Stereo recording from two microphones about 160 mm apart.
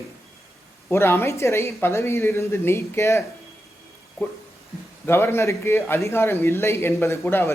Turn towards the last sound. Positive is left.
turn(degrees=15)  # may be behind; listen again after turning